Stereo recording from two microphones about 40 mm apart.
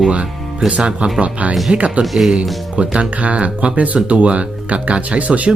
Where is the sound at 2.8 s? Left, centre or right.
Right.